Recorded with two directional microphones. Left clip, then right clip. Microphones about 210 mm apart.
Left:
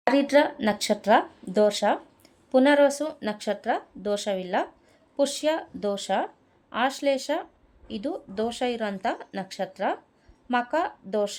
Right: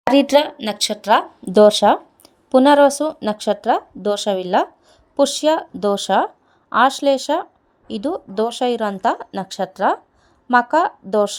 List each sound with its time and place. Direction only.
0.1 s speech: 30° right (ahead or behind)